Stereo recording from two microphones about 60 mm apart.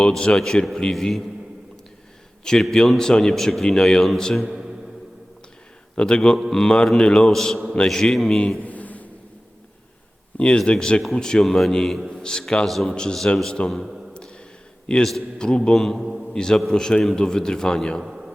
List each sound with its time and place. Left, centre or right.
0.1 s a man's voice: centre
2.4 s a man's voice: centre
4.4 s a sound: centre
6.0 s a man's voice: centre
8.6 s a sound: left
10.3 s a man's voice: centre
13.2 s a man's voice: centre
13.7 s a man's voice: centre
14.1 s a sound: centre
14.9 s a man's voice: centre
16.0 s mantra: centre
16.3 s a man's voice: centre
18.0 s a sound: centre